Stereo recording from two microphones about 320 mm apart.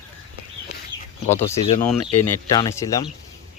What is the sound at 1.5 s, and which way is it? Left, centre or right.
Speech, centre.